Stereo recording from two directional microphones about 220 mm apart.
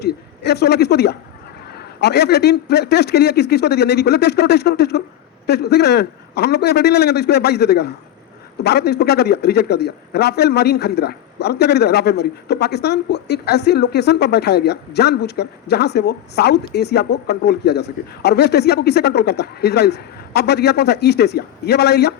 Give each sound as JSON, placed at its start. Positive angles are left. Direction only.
{"t": 0.0, "sound": "a woman's voice", "side_deg": 50}